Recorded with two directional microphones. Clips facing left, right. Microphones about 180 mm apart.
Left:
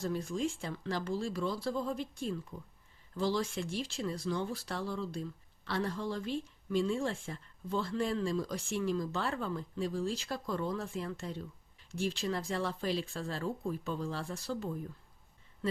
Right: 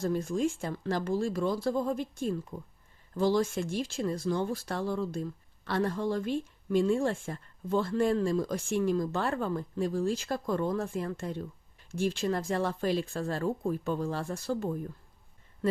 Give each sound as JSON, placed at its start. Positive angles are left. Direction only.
{"t": 0.0, "sound": "speech", "side_deg": -45}